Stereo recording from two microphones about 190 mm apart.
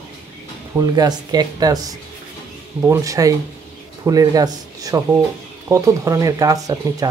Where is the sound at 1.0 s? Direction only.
20° right (ahead or behind).